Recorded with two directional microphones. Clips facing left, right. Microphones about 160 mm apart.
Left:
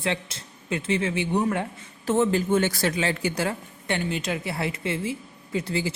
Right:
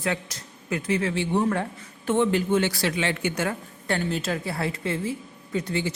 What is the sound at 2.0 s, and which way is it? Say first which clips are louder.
Speech: even; 40° left (ahead or behind).